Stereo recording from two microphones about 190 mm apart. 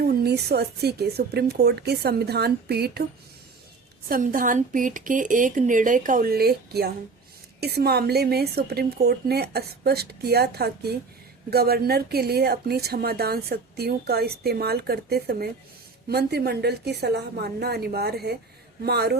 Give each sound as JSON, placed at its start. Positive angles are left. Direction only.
{"t": 0.0, "sound": "a woman's voice", "side_deg": -55}
{"t": 4.1, "sound": "a woman's voice", "side_deg": -45}